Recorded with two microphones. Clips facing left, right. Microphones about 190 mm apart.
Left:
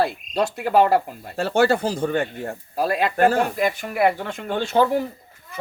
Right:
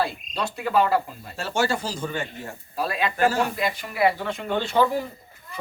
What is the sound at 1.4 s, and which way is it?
Speech, 55° left (ahead or behind).